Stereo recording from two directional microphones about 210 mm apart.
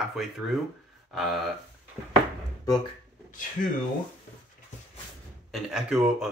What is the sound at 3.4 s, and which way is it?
Speech, 40° left (ahead or behind).